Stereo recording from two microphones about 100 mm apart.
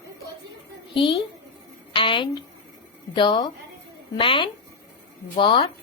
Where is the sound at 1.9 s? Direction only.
55° left (ahead or behind).